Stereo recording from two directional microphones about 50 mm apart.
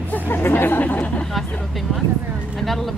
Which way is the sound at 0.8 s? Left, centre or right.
Left.